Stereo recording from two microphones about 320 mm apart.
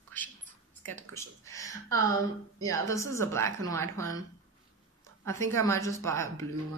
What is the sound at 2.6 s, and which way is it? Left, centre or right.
A woman's voice, centre.